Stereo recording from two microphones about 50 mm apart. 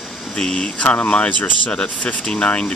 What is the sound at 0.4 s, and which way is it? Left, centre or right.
Speech, centre.